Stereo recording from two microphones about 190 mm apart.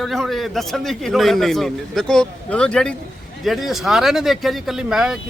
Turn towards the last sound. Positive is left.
turn(degrees=-5)  # may be behind; listen again after turning